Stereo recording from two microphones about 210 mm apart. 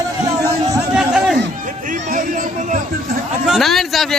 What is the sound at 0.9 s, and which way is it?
Chatter, 5° right (ahead or behind).